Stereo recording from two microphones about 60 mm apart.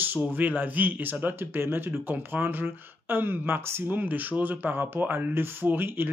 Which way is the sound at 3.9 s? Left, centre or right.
Right.